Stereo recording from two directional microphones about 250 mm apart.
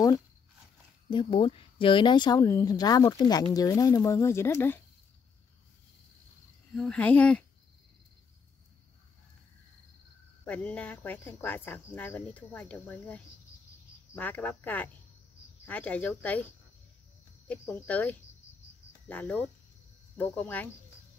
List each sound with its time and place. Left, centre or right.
1.1 s speech: left
6.7 s speech: centre
10.4 s speech: centre
17.5 s speech: centre